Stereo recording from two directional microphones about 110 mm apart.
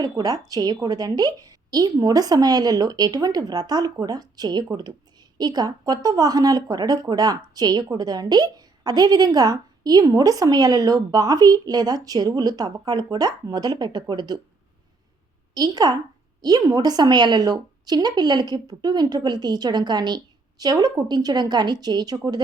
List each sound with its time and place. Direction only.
0.0 s a woman's voice: 35° right (ahead or behind)
15.5 s a woman's voice: 35° right (ahead or behind)